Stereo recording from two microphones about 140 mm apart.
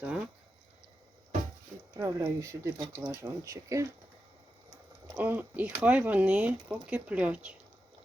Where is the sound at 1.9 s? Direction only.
20° right (ahead or behind).